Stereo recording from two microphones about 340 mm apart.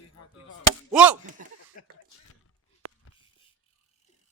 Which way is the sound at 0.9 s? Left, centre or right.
Centre.